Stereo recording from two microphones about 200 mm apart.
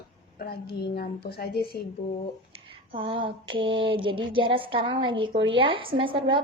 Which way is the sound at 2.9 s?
25° right (ahead or behind).